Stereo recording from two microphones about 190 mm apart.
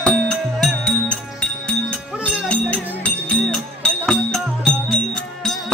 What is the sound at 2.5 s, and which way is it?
Music, 5° left (ahead or behind).